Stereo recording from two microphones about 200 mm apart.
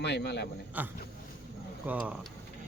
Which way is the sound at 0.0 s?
55° left (ahead or behind).